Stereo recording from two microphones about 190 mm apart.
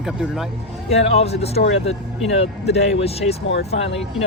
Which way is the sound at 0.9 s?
35° left (ahead or behind).